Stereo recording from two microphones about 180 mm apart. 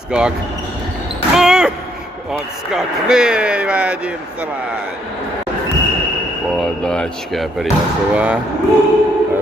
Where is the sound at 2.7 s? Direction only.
5° right (ahead or behind).